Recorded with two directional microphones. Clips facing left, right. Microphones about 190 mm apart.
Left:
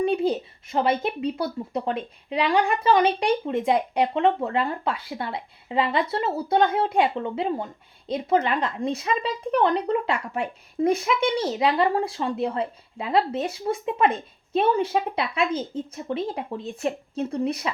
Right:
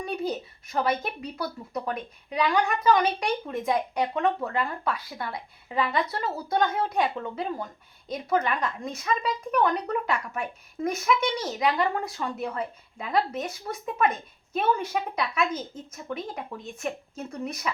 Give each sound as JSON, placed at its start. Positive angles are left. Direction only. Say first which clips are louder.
{"t": 0.0, "sound": "a woman's voice", "louder": "left 8 dB", "side_deg": 25}